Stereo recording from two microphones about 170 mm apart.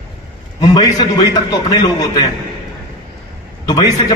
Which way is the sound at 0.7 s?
25° left (ahead or behind).